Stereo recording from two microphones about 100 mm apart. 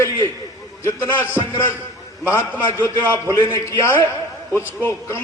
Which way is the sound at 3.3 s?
25° left (ahead or behind).